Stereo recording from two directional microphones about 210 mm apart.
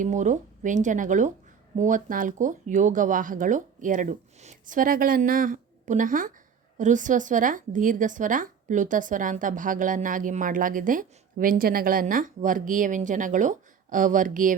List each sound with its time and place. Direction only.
0.0 s speech: 35° right (ahead or behind)